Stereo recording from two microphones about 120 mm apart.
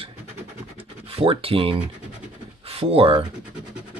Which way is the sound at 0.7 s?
50° right (ahead or behind).